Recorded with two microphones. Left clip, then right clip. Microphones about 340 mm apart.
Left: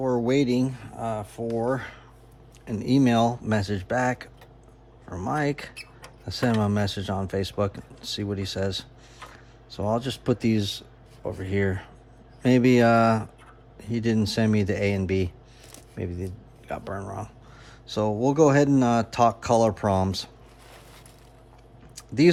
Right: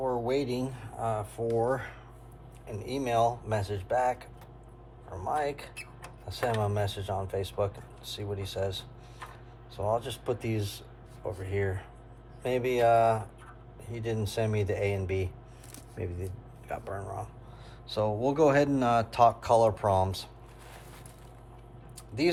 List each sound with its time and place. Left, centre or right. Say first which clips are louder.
0.0 s speech: left 6 dB; left
5.3 s speech: left 3 dB; left
9.9 s speech: left 5 dB; left
18.2 s speech: left 5 dB; centre
21.9 s a sound: left 8 dB; left